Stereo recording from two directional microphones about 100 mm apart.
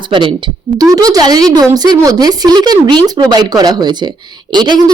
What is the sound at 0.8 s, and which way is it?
Speech, 40° right (ahead or behind).